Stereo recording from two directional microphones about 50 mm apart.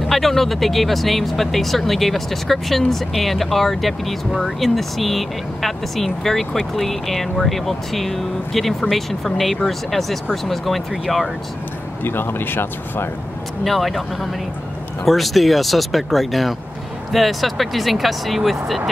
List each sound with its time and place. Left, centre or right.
0.1 s speech: centre
12.0 s speech: left
13.7 s speech: centre